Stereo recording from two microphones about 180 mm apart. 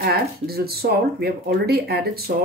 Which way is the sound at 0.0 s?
60° right (ahead or behind).